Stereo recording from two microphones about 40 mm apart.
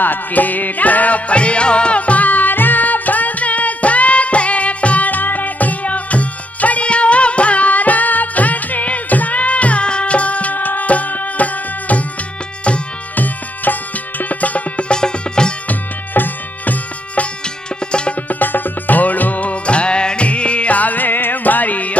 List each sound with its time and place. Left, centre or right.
0.0 s music: left
13.1 s music: left
14.9 s music: left
15.7 s music: left
18.3 s music: left